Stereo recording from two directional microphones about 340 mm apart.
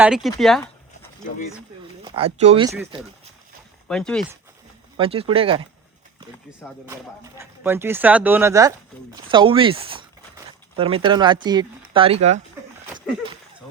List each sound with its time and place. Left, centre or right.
0.0 s speech: centre
2.0 s speech: centre
3.8 s speech: centre
4.9 s speech: centre
6.8 s speech: centre